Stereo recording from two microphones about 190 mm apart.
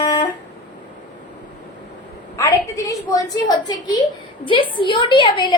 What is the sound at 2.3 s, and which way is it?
A woman's voice, 15° left (ahead or behind).